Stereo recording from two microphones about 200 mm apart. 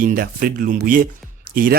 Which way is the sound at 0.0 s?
45° right (ahead or behind).